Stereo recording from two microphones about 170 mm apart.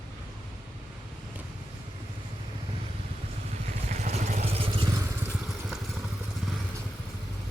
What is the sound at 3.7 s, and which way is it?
Vehicle, 45° right (ahead or behind).